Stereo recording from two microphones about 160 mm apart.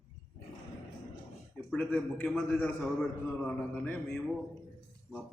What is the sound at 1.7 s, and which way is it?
A man's voice, 10° left (ahead or behind).